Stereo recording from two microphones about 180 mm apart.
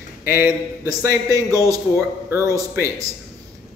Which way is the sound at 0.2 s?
10° right (ahead or behind).